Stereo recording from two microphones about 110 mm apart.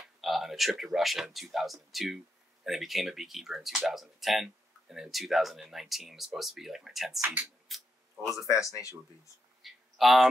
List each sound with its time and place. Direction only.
0.2 s speech: centre (ahead or behind)
8.4 s speech: 30° left (ahead or behind)
9.6 s a sound: centre (ahead or behind)